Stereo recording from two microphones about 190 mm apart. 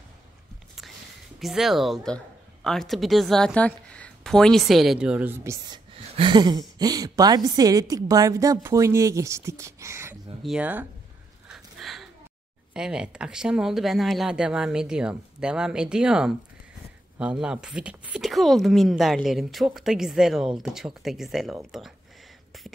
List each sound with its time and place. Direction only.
1.4 s a woman's voice: centre (ahead or behind)
11.4 s a sound: centre (ahead or behind)
12.7 s speech: 5° right (ahead or behind)